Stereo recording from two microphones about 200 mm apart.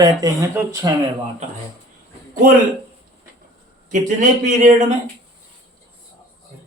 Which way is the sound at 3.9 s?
40° right (ahead or behind).